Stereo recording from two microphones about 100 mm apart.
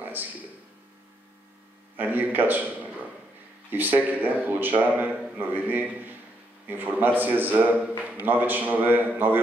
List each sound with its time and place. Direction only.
0.0 s a sound: 20° right (ahead or behind)
2.0 s a man's voice: 20° right (ahead or behind)
3.7 s a man's voice: 20° right (ahead or behind)